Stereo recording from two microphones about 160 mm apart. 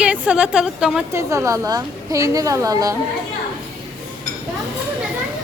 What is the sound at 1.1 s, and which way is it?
A woman's voice, 20° right (ahead or behind).